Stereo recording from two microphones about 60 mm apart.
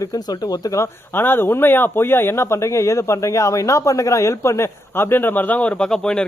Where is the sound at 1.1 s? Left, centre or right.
Left.